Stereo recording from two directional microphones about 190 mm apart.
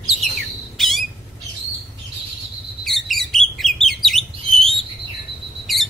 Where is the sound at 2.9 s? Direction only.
Centre (ahead or behind).